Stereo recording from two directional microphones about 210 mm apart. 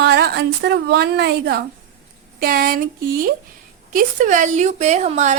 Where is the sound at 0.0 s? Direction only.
55° right (ahead or behind).